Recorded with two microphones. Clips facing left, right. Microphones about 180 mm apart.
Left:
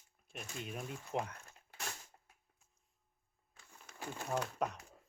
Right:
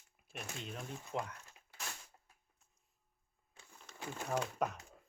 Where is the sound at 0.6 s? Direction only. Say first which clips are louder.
Left 5 dB; 10° left (ahead or behind).